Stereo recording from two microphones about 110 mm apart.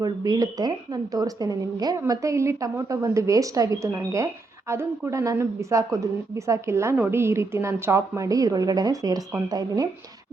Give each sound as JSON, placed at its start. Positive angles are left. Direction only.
{"t": 0.0, "sound": "a woman's voice", "side_deg": -35}